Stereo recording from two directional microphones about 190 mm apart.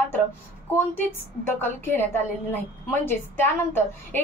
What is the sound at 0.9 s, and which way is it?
A woman's voice, 10° left (ahead or behind).